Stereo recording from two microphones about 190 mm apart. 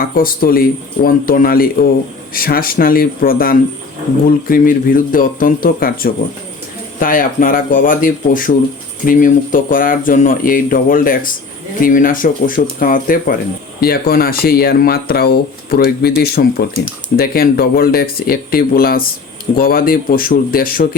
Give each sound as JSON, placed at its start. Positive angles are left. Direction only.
{"t": 0.0, "sound": "speech", "side_deg": 50}